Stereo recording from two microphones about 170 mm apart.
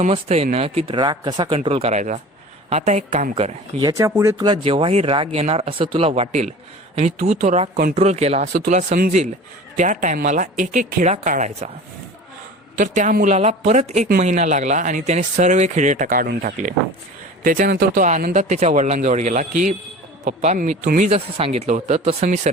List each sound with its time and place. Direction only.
0.0 s speech: 40° right (ahead or behind)
3.8 s speech: 20° right (ahead or behind); by 11.7 s 45° right (ahead or behind)
12.7 s speech: 45° right (ahead or behind)
20.8 s speech: 55° right (ahead or behind)
21.1 s speech: 35° right (ahead or behind)